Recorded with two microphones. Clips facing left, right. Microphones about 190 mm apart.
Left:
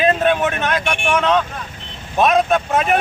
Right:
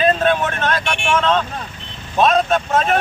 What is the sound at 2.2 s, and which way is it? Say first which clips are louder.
Speech: even; 15° left (ahead or behind).